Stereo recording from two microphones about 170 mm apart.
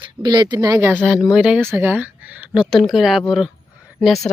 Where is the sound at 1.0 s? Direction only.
5° right (ahead or behind).